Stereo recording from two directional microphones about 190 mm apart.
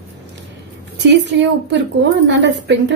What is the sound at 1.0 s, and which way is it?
A woman's voice, 65° right (ahead or behind).